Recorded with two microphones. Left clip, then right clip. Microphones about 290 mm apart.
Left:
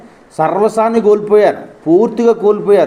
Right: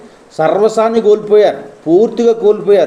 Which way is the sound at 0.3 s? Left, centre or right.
Centre.